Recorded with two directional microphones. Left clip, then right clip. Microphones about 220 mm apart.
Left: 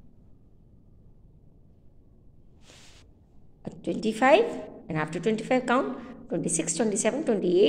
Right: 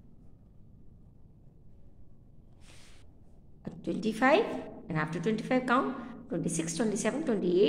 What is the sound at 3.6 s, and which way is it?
A woman's voice, 15° left (ahead or behind).